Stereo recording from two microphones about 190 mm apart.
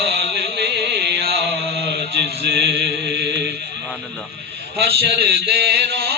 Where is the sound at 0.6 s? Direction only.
60° right (ahead or behind).